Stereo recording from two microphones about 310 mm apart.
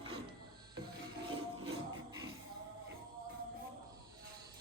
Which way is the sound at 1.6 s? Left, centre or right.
Centre.